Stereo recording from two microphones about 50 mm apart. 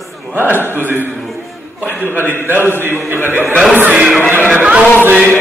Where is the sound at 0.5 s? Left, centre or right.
Left.